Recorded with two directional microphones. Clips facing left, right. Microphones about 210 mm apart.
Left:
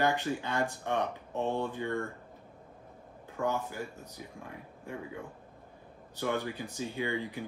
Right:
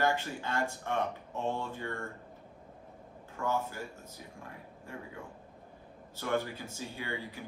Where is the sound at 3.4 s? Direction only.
15° left (ahead or behind).